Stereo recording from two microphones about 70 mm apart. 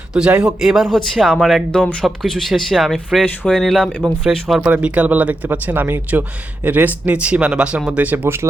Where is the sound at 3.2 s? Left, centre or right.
Centre.